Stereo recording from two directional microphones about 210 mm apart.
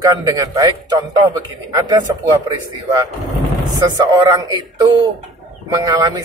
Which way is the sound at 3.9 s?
20° right (ahead or behind).